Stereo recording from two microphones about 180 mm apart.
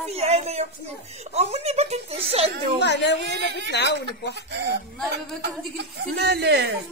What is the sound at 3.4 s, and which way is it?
Speech, 70° right (ahead or behind).